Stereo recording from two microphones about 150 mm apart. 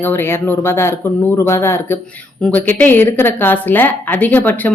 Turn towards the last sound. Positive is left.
turn(degrees=10)  # may be behind; listen again after turning